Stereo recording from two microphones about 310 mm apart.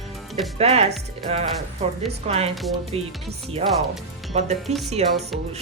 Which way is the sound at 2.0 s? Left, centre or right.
Centre.